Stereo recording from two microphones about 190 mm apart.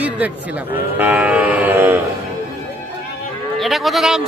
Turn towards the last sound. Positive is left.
turn(degrees=0)  # may be behind; listen again after turning